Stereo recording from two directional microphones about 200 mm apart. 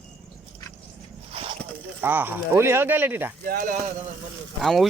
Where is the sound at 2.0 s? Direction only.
10° right (ahead or behind).